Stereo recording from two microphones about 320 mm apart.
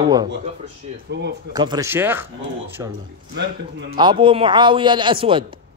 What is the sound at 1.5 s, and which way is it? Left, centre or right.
Speech, centre.